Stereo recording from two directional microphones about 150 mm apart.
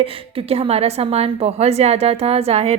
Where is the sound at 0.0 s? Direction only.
40° right (ahead or behind).